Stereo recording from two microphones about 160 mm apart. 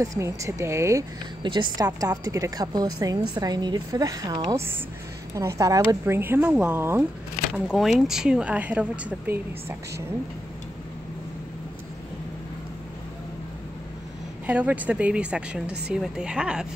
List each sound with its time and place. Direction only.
0.0 s a woman's voice: 20° right (ahead or behind)
1.4 s a woman's voice: 30° right (ahead or behind)
7.5 s speech: 5° right (ahead or behind)
14.4 s a woman's voice: 10° right (ahead or behind)